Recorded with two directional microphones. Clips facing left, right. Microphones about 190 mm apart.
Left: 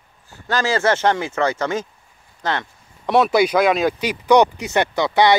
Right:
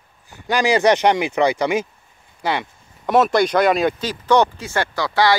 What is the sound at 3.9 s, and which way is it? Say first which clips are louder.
Speech: left 2 dB; 15° left (ahead or behind).